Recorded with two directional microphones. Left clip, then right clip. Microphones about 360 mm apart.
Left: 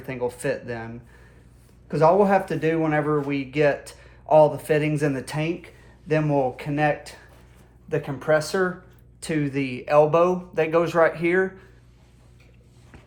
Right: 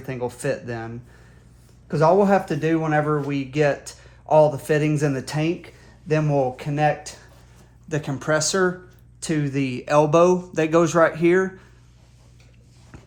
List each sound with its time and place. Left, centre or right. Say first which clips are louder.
0.0 s speech: even; right
1.9 s speech: right 1 dB; right